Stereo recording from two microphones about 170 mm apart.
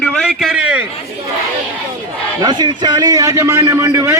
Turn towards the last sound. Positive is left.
turn(degrees=-15)  # may be behind; listen again after turning